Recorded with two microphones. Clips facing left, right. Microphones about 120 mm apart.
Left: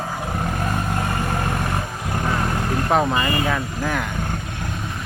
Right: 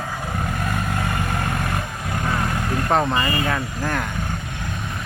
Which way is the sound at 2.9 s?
5° left (ahead or behind).